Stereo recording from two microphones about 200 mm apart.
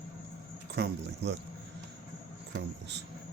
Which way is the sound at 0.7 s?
55° right (ahead or behind).